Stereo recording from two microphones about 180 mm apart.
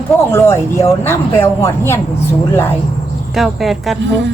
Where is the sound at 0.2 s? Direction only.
15° left (ahead or behind).